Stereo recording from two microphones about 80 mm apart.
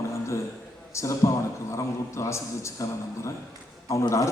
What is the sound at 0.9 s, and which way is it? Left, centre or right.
A man's voice, left.